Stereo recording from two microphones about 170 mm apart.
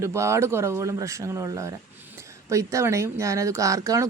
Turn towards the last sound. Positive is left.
turn(degrees=-20)  # may be behind; listen again after turning